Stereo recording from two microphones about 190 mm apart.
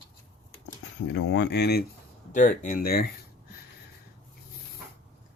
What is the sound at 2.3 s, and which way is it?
Speech, 40° left (ahead or behind).